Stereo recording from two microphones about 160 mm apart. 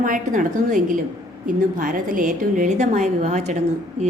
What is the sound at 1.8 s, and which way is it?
A woman's voice, 55° right (ahead or behind).